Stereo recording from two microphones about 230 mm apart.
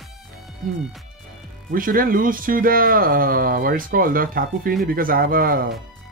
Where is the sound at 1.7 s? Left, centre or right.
Right.